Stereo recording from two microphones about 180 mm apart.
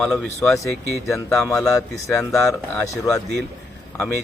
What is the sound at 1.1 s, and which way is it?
Speech, 15° left (ahead or behind).